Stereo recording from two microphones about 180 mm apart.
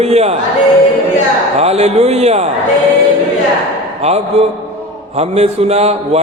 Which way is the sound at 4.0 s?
35° right (ahead or behind).